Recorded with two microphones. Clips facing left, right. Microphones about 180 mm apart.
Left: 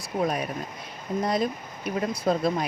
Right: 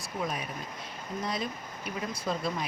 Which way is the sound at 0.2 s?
65° left (ahead or behind).